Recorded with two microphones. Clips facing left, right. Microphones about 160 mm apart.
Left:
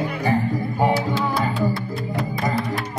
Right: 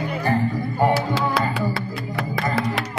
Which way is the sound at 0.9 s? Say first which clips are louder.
Even; 85° right.